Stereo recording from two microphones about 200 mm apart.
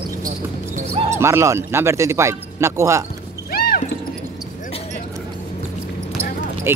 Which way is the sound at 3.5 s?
50° left (ahead or behind).